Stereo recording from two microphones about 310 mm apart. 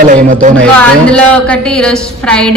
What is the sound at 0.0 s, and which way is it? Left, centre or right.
Speech, right.